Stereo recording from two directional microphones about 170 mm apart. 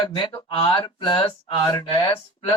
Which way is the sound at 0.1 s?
30° left (ahead or behind).